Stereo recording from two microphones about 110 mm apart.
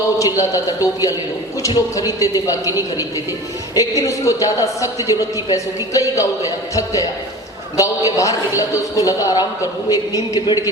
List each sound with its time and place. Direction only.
0.2 s a man's voice: 30° left (ahead or behind)
3.8 s a man's voice: 30° left (ahead or behind)